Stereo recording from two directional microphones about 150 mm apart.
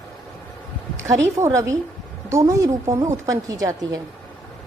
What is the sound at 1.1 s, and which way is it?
A woman's voice, 20° right (ahead or behind).